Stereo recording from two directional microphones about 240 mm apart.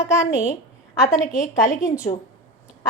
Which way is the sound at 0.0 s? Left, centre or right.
Centre.